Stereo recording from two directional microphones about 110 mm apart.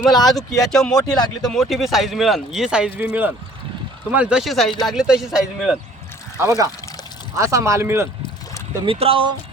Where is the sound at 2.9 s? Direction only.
15° right (ahead or behind).